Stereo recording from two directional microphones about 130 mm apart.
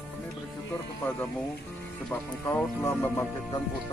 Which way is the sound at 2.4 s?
20° left (ahead or behind).